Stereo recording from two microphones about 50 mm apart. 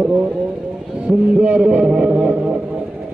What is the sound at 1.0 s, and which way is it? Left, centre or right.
A man's voice, right.